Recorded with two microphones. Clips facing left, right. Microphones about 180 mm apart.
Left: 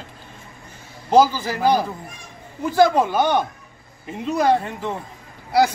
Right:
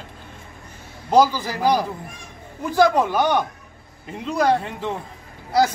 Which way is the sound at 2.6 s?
5° left (ahead or behind).